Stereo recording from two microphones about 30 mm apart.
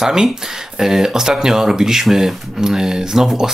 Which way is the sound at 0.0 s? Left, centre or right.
Right.